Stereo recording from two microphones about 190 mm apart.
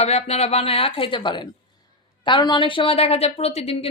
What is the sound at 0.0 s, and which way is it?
A woman's voice, 35° left (ahead or behind).